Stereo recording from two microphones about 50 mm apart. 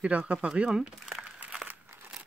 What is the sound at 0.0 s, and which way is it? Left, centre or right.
Speech, right.